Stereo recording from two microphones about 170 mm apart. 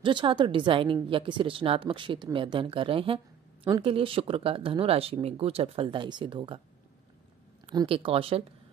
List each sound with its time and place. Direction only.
0.0 s a woman's voice: 30° right (ahead or behind)
7.7 s speech: 30° right (ahead or behind)